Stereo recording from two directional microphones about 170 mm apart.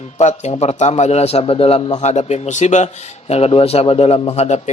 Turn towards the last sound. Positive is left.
turn(degrees=40)  # may be behind; listen again after turning